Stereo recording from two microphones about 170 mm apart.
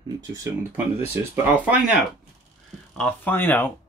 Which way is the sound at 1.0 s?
10° right (ahead or behind).